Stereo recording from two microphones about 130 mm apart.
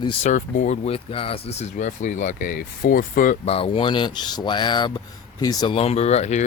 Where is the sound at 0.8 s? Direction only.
45° left (ahead or behind); by 3.3 s 90° left.